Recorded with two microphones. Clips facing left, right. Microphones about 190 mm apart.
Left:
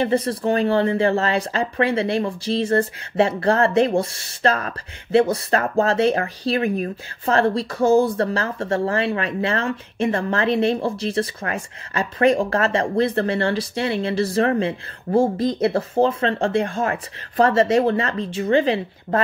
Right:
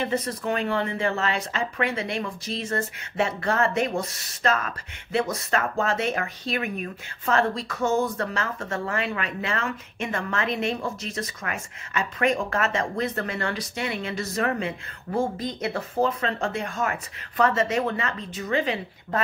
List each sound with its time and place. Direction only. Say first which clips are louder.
0.0 s speech: left 7 dB; 30° left (ahead or behind)